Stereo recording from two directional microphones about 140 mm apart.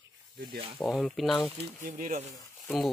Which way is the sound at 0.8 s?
Centre (ahead or behind).